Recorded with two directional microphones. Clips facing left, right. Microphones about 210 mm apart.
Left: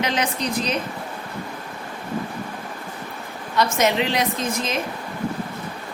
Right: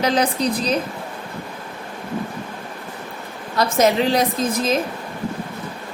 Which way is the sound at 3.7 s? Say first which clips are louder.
Right 7 dB; 35° right (ahead or behind).